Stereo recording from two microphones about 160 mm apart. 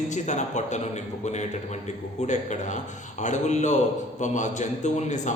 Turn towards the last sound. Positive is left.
turn(degrees=50)  # may be behind; listen again after turning